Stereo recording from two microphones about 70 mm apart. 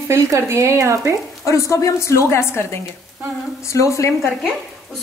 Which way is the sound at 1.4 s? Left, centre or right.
Left.